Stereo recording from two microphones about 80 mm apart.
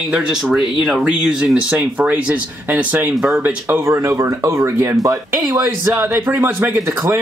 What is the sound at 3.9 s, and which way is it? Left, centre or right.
Speech, right.